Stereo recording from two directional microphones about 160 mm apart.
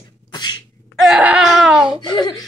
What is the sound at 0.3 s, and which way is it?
Sneeze, 25° left (ahead or behind).